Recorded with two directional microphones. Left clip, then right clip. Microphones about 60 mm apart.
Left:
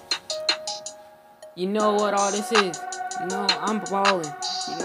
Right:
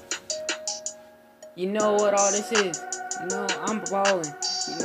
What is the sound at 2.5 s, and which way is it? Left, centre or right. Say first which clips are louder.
Speech: left 3 dB; left.